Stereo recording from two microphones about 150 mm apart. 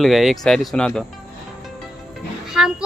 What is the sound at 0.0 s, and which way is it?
A child's voice, centre (ahead or behind).